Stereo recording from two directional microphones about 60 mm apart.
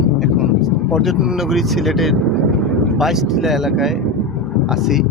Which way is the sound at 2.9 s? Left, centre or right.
Centre.